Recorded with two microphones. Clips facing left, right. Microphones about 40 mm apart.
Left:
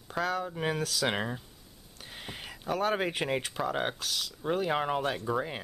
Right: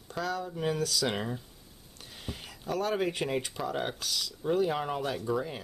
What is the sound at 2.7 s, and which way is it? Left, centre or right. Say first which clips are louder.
Speech: left 1 dB; left.